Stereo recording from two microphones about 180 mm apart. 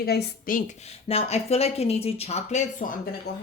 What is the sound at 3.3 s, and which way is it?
Speech, 65° left (ahead or behind).